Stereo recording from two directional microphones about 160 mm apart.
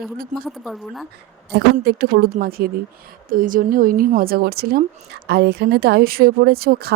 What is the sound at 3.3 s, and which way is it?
A woman's voice, 60° right (ahead or behind).